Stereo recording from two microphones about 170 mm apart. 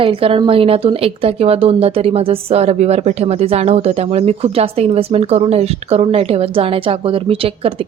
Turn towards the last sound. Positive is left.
turn(degrees=-35)  # may be behind; listen again after turning